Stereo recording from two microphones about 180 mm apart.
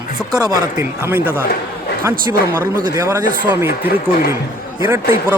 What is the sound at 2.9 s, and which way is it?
Music, 15° right (ahead or behind).